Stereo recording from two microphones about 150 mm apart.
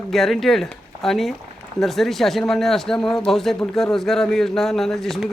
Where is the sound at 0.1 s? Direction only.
Centre (ahead or behind).